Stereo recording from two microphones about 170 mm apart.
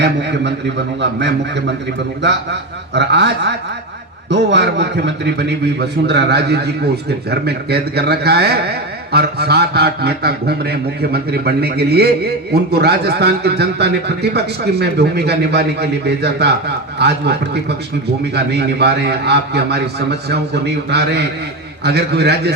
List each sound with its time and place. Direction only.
0.0 s a man's voice: 90° right; by 22.5 s 75° right (ahead or behind)